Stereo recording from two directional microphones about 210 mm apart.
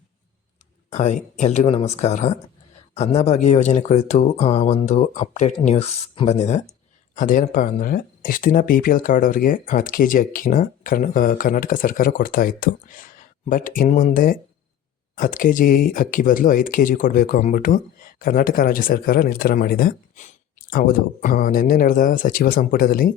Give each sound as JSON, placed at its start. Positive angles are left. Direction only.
{"t": 0.9, "sound": "speech", "side_deg": 35}